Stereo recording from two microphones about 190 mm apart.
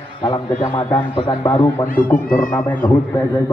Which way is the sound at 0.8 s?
10° left (ahead or behind).